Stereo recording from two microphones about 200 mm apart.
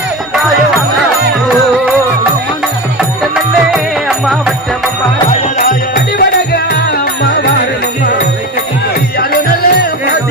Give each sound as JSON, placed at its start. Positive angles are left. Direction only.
{"t": 5.5, "sound": "music", "side_deg": 50}
{"t": 9.1, "sound": "music", "side_deg": 50}